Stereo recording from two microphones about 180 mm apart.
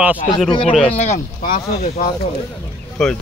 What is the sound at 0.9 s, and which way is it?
Speech, 35° left (ahead or behind).